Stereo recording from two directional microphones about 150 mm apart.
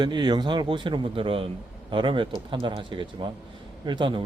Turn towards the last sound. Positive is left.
turn(degrees=-30)  # may be behind; listen again after turning